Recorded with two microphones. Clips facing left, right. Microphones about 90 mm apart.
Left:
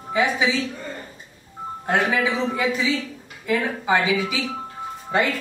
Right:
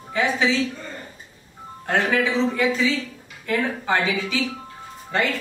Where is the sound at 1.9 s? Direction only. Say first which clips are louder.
Even; 15° left (ahead or behind).